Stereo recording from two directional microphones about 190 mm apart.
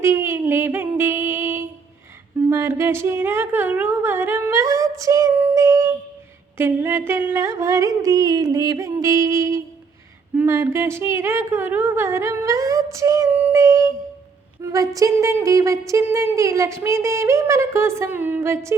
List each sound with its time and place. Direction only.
0.0 s music: 15° right (ahead or behind)
2.5 s a woman's voice: 15° right (ahead or behind)